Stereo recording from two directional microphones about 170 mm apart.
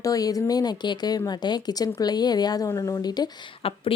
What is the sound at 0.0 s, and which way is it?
A woman's voice, 20° left (ahead or behind).